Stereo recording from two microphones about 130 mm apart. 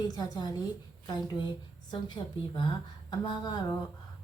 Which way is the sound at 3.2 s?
35° left (ahead or behind).